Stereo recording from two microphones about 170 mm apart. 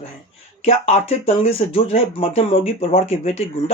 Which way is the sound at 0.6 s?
35° left (ahead or behind).